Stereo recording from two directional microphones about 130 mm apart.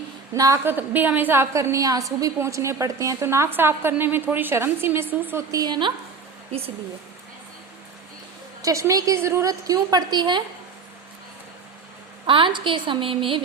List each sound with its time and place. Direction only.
0.3 s a woman's voice: 25° right (ahead or behind)
0.6 s a woman's voice: 15° right (ahead or behind)
5.5 s a woman's voice: 30° right (ahead or behind)
8.6 s a woman's voice: 25° right (ahead or behind)
12.2 s a woman's voice: 40° right (ahead or behind)